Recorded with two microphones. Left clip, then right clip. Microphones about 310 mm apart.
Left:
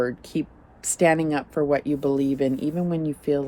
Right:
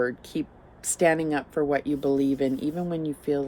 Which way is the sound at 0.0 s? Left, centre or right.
Left.